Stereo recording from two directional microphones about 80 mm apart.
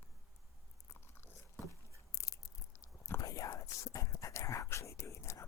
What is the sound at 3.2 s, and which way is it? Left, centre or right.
Whispering, left.